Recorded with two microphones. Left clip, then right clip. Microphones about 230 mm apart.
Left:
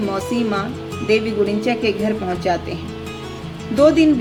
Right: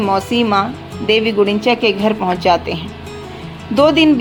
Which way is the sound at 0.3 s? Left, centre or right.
Right.